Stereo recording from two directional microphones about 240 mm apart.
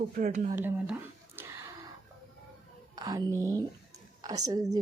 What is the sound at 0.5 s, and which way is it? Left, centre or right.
Speech, centre.